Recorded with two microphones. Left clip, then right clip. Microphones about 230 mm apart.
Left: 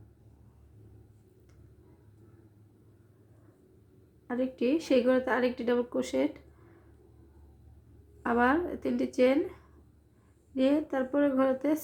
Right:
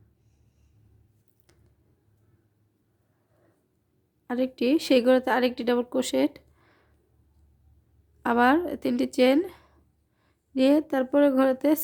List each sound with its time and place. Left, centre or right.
4.3 s speech: right
8.2 s speech: right